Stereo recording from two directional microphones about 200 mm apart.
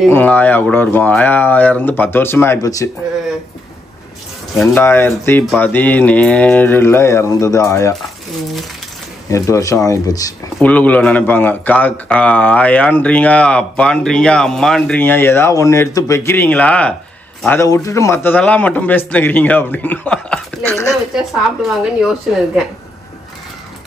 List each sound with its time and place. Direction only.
0.1 s a man's voice: 10° left (ahead or behind)
4.6 s a man's voice: 10° left (ahead or behind)
9.3 s a man's voice: 15° left (ahead or behind)
10.7 s a man's voice: 5° left (ahead or behind)
21.1 s speech: centre (ahead or behind)